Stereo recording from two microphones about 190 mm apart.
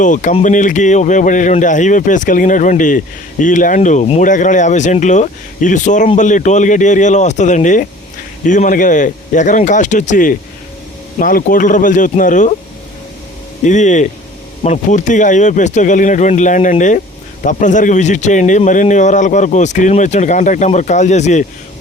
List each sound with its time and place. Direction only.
0.0 s speech: 40° left (ahead or behind)
13.7 s speech: 40° left (ahead or behind)